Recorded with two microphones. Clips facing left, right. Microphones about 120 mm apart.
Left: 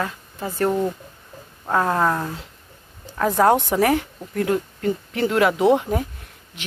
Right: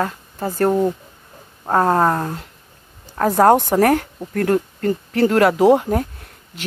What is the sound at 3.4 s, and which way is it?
A woman's voice, 40° right (ahead or behind).